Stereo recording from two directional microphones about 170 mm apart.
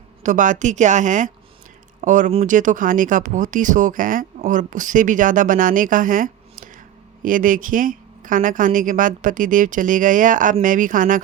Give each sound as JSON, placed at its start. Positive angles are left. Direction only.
{"t": 0.2, "sound": "a woman's voice", "side_deg": -50}